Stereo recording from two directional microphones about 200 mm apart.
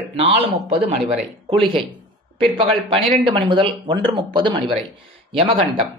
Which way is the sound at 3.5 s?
25° right (ahead or behind).